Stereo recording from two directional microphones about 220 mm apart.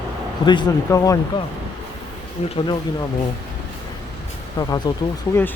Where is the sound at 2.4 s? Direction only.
30° left (ahead or behind).